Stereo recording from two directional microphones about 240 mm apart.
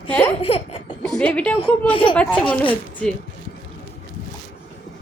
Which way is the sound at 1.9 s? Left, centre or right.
Left.